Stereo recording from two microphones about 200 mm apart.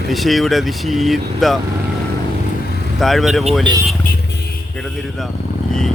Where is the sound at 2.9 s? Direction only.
Centre (ahead or behind).